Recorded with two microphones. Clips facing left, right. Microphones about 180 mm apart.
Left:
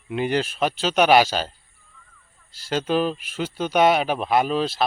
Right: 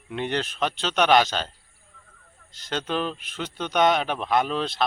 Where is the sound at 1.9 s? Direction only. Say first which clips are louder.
Even; 55° right (ahead or behind).